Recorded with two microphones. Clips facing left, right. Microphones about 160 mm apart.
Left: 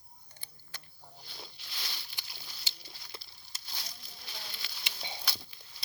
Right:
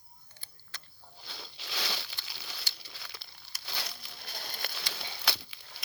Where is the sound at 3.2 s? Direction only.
70° right (ahead or behind); by 4.8 s 55° right (ahead or behind).